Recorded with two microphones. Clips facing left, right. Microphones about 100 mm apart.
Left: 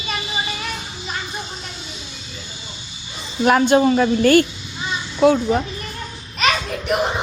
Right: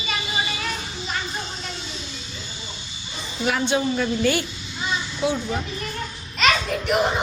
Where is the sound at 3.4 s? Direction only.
55° left (ahead or behind).